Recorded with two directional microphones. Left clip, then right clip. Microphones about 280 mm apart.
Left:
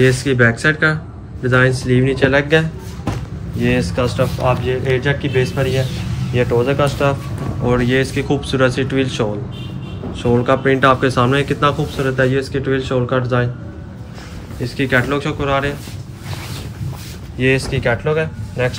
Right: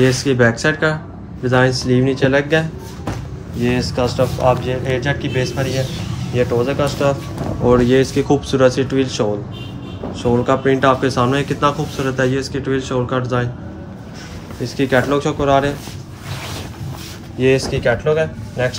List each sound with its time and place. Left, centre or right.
0.0 s speech: centre
14.6 s speech: centre
17.4 s speech: centre